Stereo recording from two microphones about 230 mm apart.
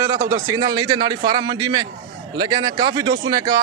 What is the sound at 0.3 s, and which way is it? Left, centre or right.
A man's voice, centre.